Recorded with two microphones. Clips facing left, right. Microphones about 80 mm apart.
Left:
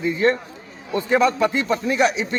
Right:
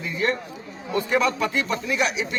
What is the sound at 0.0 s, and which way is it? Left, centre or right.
Speech, left.